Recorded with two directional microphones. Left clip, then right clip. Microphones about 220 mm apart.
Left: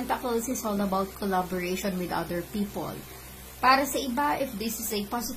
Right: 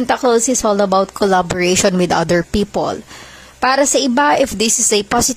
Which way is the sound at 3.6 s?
45° right (ahead or behind).